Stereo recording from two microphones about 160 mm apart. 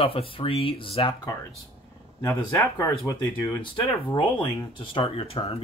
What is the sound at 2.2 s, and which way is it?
Speech, 15° left (ahead or behind).